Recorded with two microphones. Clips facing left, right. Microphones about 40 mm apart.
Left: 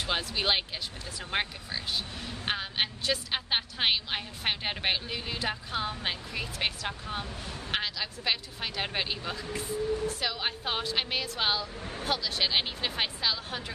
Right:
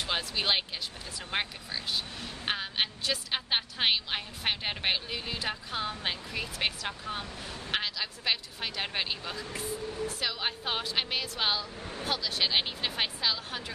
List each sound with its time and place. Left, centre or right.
0.0 s a woman's voice: centre